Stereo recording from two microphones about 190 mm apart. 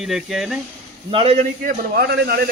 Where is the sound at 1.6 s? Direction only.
60° right (ahead or behind).